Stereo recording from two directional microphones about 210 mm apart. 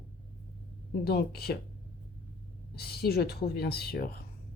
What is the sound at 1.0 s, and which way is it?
Speech, 50° left (ahead or behind).